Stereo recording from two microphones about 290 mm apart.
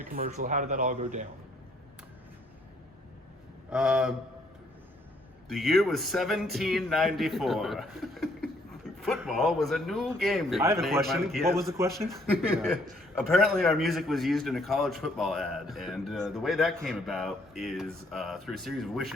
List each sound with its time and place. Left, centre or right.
0.1 s speech: right
3.7 s speech: centre
5.5 s speech: centre
13.1 s speech: centre